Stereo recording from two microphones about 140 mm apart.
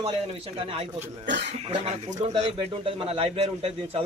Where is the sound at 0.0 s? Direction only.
45° right (ahead or behind).